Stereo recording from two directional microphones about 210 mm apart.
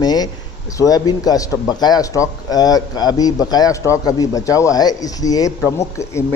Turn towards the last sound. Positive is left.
turn(degrees=15)  # may be behind; listen again after turning